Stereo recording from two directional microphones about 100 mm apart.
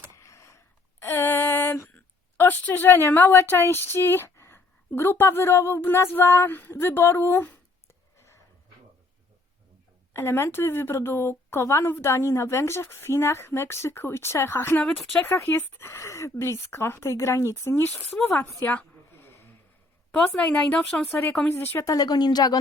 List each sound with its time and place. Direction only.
0.2 s a sound: 30° left (ahead or behind)
2.4 s a woman's voice: 20° left (ahead or behind)
10.1 s a woman's voice: 25° left (ahead or behind)
18.1 s a woman's voice: 10° left (ahead or behind)
18.4 s a sound: 15° left (ahead or behind)
20.1 s a woman's voice: 10° left (ahead or behind)
21.5 s a woman's voice: 25° left (ahead or behind)
21.8 s speech: 40° left (ahead or behind)